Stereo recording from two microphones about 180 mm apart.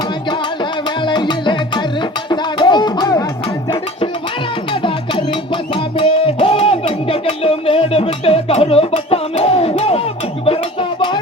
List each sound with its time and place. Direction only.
0.3 s music: 25° left (ahead or behind)
4.7 s music: 25° left (ahead or behind)
10.4 s a sound: 30° left (ahead or behind)